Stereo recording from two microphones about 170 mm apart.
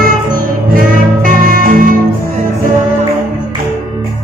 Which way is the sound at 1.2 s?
50° right (ahead or behind).